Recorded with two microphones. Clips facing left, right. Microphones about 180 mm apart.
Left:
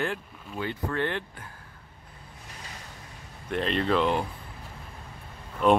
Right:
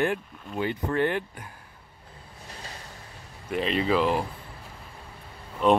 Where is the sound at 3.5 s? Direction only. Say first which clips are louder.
Right 1 dB; 5° right (ahead or behind).